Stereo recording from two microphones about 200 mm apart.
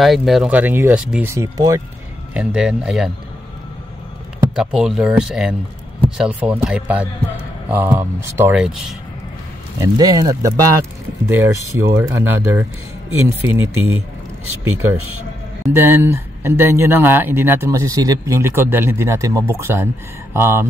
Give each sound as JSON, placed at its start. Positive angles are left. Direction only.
{"t": 0.0, "sound": "speech", "side_deg": 0}
{"t": 2.3, "sound": "a man's voice", "side_deg": -5}
{"t": 4.6, "sound": "a man's voice", "side_deg": -5}
{"t": 9.8, "sound": "speech", "side_deg": -20}
{"t": 13.4, "sound": "speech", "side_deg": -90}
{"t": 15.7, "sound": "speech", "side_deg": -10}